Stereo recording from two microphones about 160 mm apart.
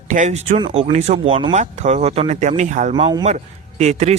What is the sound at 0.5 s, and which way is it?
Speech, 30° right (ahead or behind).